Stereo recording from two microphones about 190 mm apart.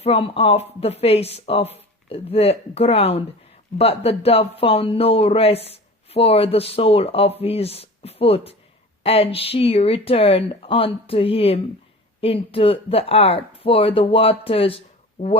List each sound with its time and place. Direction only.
0.0 s speech: 30° left (ahead or behind)